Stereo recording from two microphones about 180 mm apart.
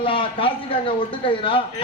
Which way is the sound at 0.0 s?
30° left (ahead or behind).